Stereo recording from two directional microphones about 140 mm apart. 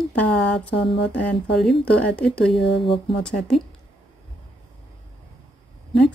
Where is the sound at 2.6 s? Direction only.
40° left (ahead or behind).